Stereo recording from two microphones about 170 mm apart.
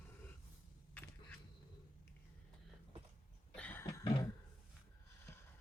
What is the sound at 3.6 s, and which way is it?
Cough, 10° left (ahead or behind).